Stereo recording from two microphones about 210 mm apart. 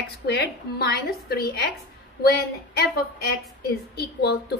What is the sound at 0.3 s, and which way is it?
A woman's voice, 50° left (ahead or behind).